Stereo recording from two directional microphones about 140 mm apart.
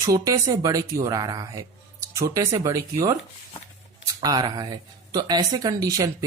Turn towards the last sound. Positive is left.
turn(degrees=-25)  # may be behind; listen again after turning